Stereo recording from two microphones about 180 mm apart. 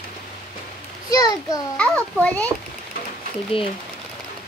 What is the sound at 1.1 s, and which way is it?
Speech, 20° left (ahead or behind).